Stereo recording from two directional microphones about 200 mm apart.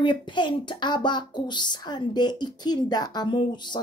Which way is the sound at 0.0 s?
25° left (ahead or behind).